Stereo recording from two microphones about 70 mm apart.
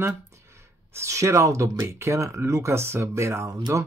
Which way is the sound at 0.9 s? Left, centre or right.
Right.